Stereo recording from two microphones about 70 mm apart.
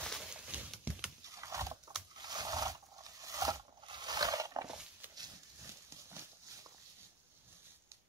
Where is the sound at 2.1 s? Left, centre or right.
Right.